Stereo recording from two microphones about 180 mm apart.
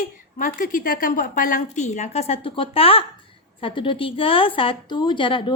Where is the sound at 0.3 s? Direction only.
50° left (ahead or behind).